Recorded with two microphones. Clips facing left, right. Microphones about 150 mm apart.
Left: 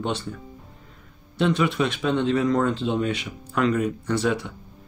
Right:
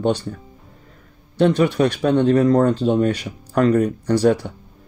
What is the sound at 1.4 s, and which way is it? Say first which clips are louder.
Speech: right 6 dB; 40° right (ahead or behind).